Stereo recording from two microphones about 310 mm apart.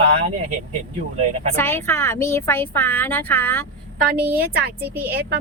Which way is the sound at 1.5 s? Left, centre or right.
Centre.